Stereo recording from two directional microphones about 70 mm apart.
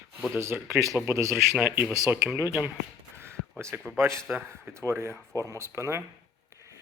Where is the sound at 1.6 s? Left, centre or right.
Right.